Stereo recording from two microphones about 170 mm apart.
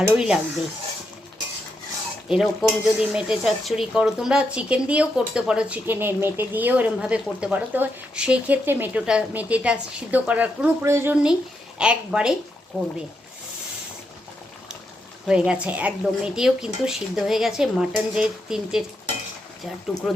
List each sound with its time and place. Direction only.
0.2 s speech: 5° right (ahead or behind)
2.3 s speech: centre (ahead or behind)
15.3 s speech: 5° right (ahead or behind)
19.9 s speech: 20° left (ahead or behind)